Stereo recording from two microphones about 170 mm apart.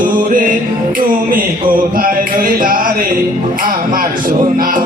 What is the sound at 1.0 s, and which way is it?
Speech, 55° right (ahead or behind).